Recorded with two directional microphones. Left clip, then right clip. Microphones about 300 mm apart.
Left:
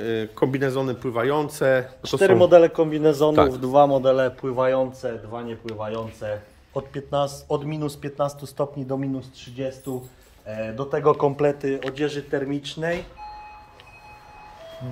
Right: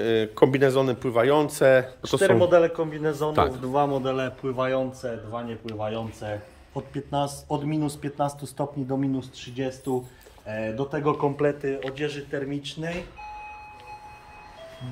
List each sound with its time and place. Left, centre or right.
0.0 s a man's voice: centre
2.4 s a man's voice: left; by 9.1 s centre
10.4 s a man's voice: centre
11.1 s a man's voice: left; by 12.9 s centre